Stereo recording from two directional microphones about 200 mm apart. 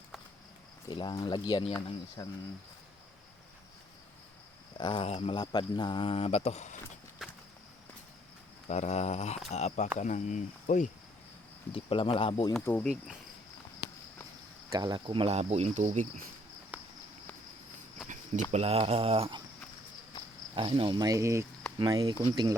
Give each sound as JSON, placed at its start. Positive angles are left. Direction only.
{"t": 0.9, "sound": "speech", "side_deg": 20}
{"t": 4.8, "sound": "speech", "side_deg": 25}
{"t": 7.2, "sound": "a sound", "side_deg": 0}
{"t": 8.6, "sound": "cricket", "side_deg": 35}
{"t": 11.7, "sound": "speech", "side_deg": 25}
{"t": 12.6, "sound": "speech", "side_deg": 5}
{"t": 14.7, "sound": "speech", "side_deg": -20}
{"t": 16.7, "sound": "walk", "side_deg": -10}
{"t": 18.5, "sound": "speech", "side_deg": -30}
{"t": 20.6, "sound": "speech", "side_deg": -25}